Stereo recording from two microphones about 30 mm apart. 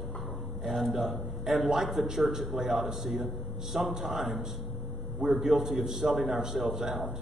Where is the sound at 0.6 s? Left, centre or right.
Centre.